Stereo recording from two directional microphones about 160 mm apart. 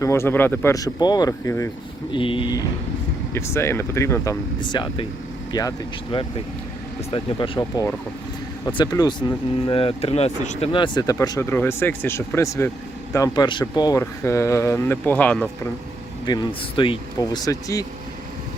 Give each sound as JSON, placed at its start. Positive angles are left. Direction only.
{"t": 0.0, "sound": "speech", "side_deg": 15}
{"t": 2.1, "sound": "speech", "side_deg": 30}
{"t": 3.3, "sound": "speech", "side_deg": 15}
{"t": 8.6, "sound": "speech", "side_deg": 25}
{"t": 10.7, "sound": "speech", "side_deg": 30}
{"t": 16.2, "sound": "speech", "side_deg": 30}